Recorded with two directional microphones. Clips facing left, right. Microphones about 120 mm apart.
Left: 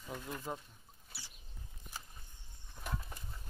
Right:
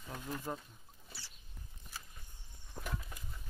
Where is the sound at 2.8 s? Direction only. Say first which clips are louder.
Right 2 dB; 30° right (ahead or behind).